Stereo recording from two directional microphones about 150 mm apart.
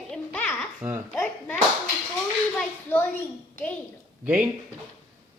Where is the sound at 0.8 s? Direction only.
15° right (ahead or behind).